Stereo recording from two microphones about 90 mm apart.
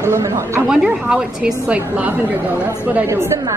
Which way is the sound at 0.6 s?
10° right (ahead or behind).